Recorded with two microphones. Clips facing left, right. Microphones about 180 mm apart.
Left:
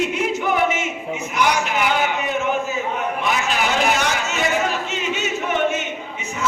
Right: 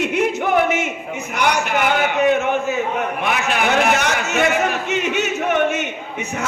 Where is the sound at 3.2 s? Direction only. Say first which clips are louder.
Right 2 dB; 55° right (ahead or behind).